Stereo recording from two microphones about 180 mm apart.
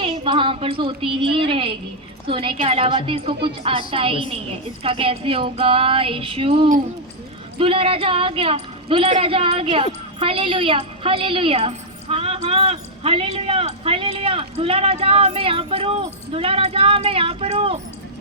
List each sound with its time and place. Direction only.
0.0 s a woman's voice: 30° right (ahead or behind)